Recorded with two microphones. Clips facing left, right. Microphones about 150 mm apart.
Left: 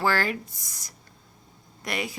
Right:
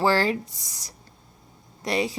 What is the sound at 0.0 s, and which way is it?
Speech, 30° right (ahead or behind).